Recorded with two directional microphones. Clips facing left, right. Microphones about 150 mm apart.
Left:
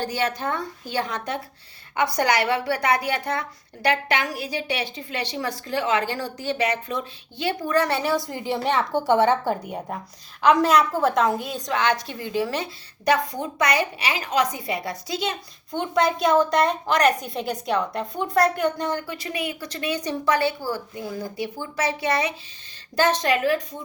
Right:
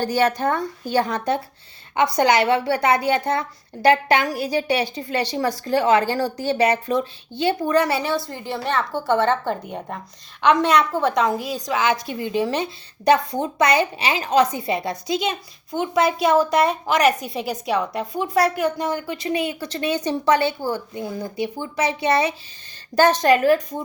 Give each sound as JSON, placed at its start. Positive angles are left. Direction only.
{"t": 0.0, "sound": "a woman's voice", "side_deg": -40}
{"t": 2.0, "sound": "a woman's voice", "side_deg": -25}
{"t": 7.9, "sound": "a woman's voice", "side_deg": -5}
{"t": 8.1, "sound": "a woman's voice", "side_deg": 15}
{"t": 12.0, "sound": "a woman's voice", "side_deg": -20}
{"t": 19.0, "sound": "speech", "side_deg": -25}
{"t": 23.0, "sound": "a woman's voice", "side_deg": -45}